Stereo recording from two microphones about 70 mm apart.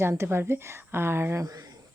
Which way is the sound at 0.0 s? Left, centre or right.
Right.